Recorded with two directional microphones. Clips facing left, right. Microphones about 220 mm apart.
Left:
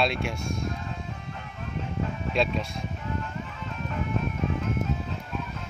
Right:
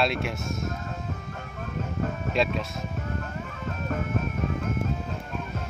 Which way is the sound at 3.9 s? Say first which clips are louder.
Right 1 dB; 45° right (ahead or behind).